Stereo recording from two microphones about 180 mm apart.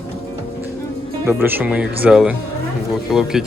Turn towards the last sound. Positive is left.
turn(degrees=0)  # may be behind; listen again after turning